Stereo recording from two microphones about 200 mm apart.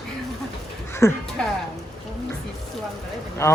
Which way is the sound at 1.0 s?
15° left (ahead or behind).